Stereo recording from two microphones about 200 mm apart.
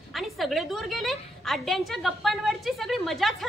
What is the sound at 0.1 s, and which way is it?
A woman's voice, centre (ahead or behind).